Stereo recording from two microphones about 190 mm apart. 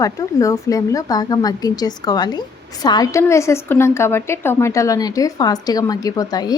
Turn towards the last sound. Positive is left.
turn(degrees=20)  # may be behind; listen again after turning